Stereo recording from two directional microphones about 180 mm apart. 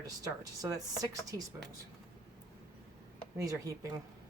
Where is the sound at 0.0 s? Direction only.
20° right (ahead or behind).